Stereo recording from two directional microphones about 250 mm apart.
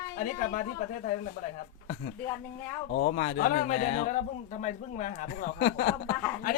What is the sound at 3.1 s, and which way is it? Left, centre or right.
A man's voice, left.